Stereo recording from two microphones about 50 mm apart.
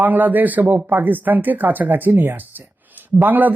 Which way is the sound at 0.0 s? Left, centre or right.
Right.